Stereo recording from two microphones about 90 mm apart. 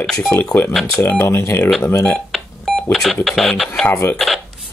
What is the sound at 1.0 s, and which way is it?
Speech, 25° left (ahead or behind).